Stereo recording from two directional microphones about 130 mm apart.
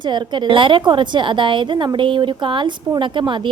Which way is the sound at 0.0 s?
35° right (ahead or behind).